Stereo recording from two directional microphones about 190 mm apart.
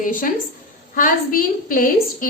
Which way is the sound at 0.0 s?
45° left (ahead or behind).